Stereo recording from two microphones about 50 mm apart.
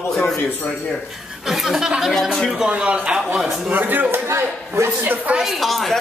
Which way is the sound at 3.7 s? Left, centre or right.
Right.